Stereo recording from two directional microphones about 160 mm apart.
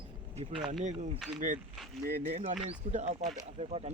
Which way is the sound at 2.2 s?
35° right (ahead or behind).